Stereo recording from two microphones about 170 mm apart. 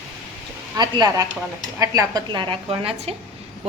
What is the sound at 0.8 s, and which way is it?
A woman's voice, 20° right (ahead or behind).